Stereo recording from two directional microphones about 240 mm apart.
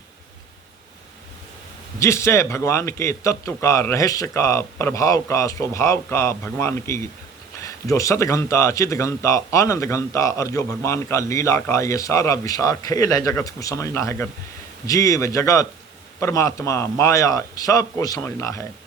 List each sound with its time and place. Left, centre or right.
2.0 s speech: centre